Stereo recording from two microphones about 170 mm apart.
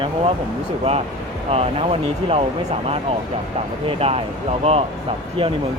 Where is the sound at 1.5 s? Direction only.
35° right (ahead or behind).